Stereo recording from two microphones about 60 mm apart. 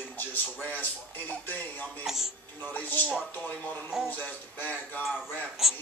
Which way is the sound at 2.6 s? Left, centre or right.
Left.